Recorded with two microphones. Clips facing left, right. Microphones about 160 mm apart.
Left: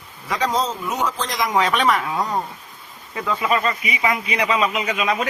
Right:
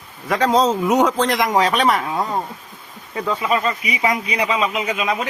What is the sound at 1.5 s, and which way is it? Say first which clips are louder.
Speech: even; 35° right (ahead or behind).